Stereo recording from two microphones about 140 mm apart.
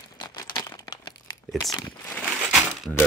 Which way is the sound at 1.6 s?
25° left (ahead or behind).